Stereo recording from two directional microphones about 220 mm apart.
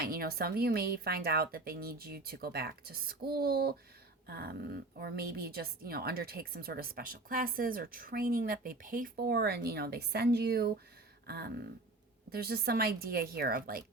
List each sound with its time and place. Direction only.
0.0 s a woman's voice: 45° right (ahead or behind)